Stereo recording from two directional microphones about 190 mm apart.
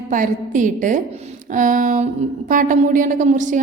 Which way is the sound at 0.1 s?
45° right (ahead or behind).